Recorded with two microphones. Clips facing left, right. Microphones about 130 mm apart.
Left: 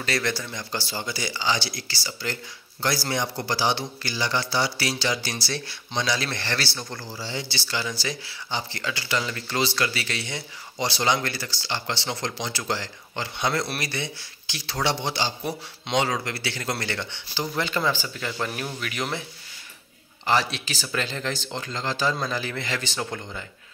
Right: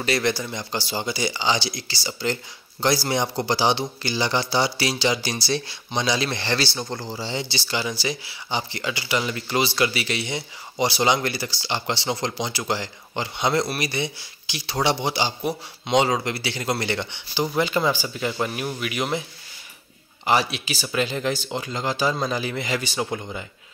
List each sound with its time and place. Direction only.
0.0 s speech: 15° right (ahead or behind)
20.2 s speech: 10° right (ahead or behind)